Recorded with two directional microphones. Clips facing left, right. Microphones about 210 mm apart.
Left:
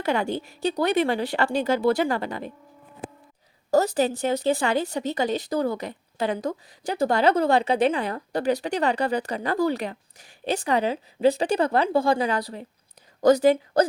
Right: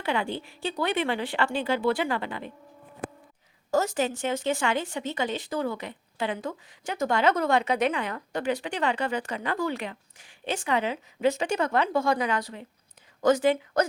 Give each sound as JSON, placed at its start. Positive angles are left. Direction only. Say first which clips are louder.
{"t": 0.0, "sound": "speech", "louder": "left 4 dB", "side_deg": 40}
{"t": 3.7, "sound": "speech", "louder": "left 5 dB", "side_deg": 35}